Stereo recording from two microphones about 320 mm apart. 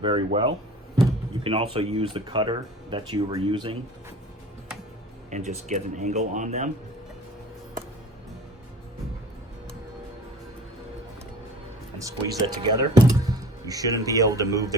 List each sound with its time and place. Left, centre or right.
0.0 s speech: centre
5.3 s speech: right
11.9 s speech: centre